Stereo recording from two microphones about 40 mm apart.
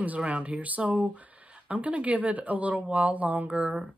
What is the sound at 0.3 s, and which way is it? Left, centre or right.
Speech, right.